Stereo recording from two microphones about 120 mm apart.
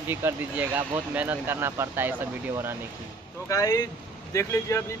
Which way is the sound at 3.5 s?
30° left (ahead or behind).